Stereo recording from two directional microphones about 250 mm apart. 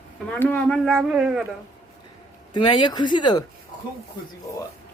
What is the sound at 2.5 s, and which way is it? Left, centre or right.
Speech, centre.